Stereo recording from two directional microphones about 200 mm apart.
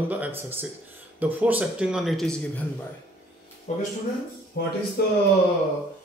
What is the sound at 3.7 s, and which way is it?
Speech, 35° left (ahead or behind).